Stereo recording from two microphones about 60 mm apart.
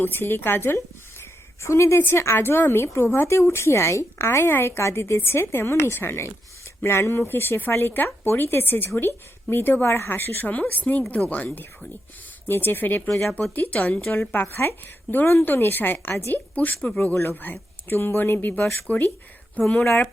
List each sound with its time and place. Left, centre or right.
0.0 s speech: left
1.2 s a sound: left
2.0 s a woman's voice: left
12.5 s a woman's voice: left
19.6 s speech: centre